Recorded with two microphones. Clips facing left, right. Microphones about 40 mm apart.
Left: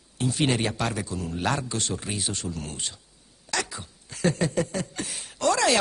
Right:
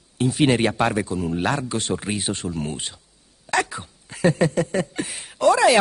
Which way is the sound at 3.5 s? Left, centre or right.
Right.